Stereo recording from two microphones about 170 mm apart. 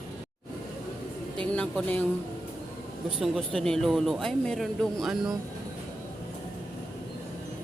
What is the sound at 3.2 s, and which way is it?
Speech, centre (ahead or behind).